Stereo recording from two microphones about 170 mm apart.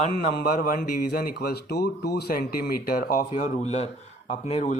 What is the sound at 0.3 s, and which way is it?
A man's voice, 60° left (ahead or behind).